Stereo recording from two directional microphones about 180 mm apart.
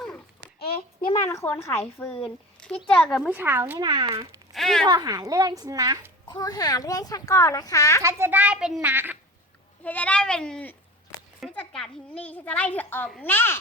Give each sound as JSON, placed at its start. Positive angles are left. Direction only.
{"t": 1.1, "sound": "a child's voice", "side_deg": 15}
{"t": 3.8, "sound": "a woman's voice", "side_deg": -25}
{"t": 4.5, "sound": "speech", "side_deg": 0}
{"t": 4.9, "sound": "a woman's voice", "side_deg": -20}
{"t": 6.2, "sound": "a child's voice", "side_deg": 20}
{"t": 8.0, "sound": "speech", "side_deg": -10}
{"t": 9.8, "sound": "a child's voice", "side_deg": 10}